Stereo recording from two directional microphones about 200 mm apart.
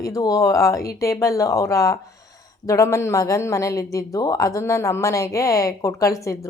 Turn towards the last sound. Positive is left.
turn(degrees=15)  # may be behind; listen again after turning